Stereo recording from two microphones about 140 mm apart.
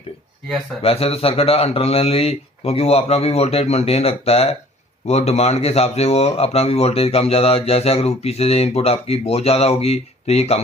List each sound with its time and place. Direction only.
0.4 s speech: 5° left (ahead or behind)
0.8 s speech: 45° left (ahead or behind)